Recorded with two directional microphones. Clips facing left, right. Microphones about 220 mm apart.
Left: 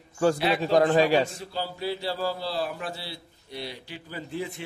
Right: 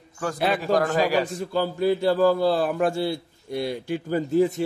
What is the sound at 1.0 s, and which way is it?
Speech, 25° left (ahead or behind).